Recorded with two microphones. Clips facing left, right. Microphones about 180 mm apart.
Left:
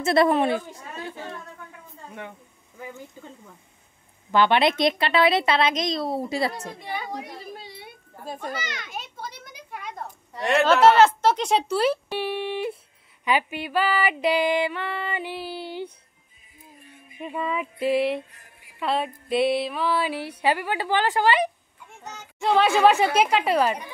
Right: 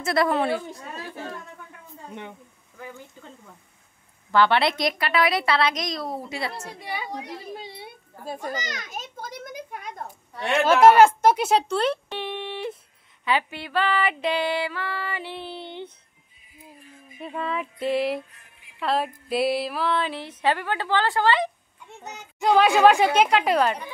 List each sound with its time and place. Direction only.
0.0 s a woman's voice: 25° left (ahead or behind)
4.3 s a woman's voice: 20° left (ahead or behind); by 6.5 s 35° left (ahead or behind)
8.5 s a child's voice: 40° right (ahead or behind)
10.6 s speech: 10° right (ahead or behind)
11.6 s speech: 5° left (ahead or behind)
13.2 s music: 15° left (ahead or behind)
15.3 s music: 5° left (ahead or behind)
17.2 s a sound: 5° left (ahead or behind)
20.4 s music: 10° left (ahead or behind)
22.4 s a sound: centre (ahead or behind)